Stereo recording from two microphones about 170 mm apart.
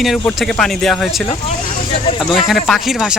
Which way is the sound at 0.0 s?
Centre (ahead or behind).